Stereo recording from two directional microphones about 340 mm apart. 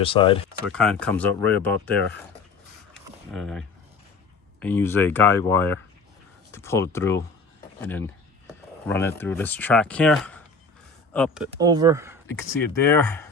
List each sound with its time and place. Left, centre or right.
0.0 s speech: centre
0.6 s speech: centre
3.3 s speech: centre
11.6 s speech: centre
12.3 s speech: centre